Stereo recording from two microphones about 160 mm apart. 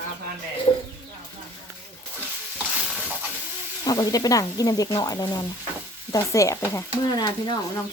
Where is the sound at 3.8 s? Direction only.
25° left (ahead or behind).